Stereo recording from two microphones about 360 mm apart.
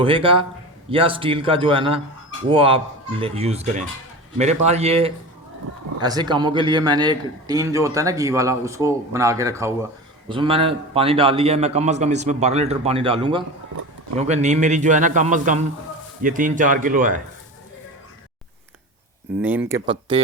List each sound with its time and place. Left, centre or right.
0.0 s a man's voice: centre
19.4 s a man's voice: centre